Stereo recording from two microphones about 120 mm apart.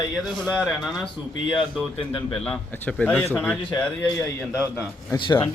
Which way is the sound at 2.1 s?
40° left (ahead or behind).